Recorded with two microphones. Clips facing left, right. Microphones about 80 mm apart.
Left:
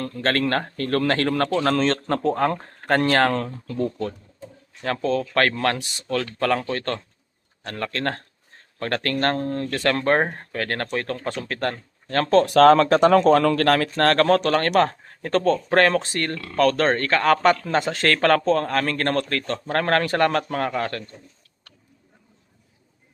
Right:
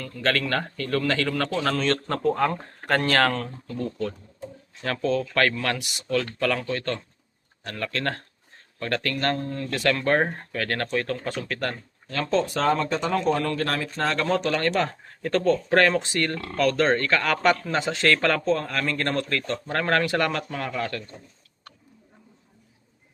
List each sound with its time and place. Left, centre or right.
0.0 s speech: left
3.3 s speech: left
12.2 s speech: left
14.8 s speech: left
16.3 s speech: right
16.6 s speech: left